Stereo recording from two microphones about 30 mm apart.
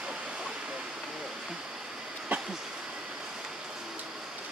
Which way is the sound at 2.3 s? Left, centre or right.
Right.